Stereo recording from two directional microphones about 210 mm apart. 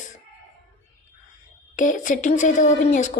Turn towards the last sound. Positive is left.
turn(degrees=35)  # may be behind; listen again after turning